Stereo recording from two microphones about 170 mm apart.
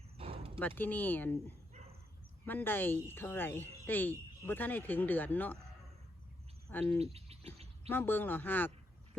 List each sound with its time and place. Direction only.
0.2 s bow-wow: 35° right (ahead or behind)
0.8 s speech: 10° left (ahead or behind)
6.7 s speech: 10° left (ahead or behind)
7.0 s bird: 35° right (ahead or behind)
7.9 s speech: 10° left (ahead or behind)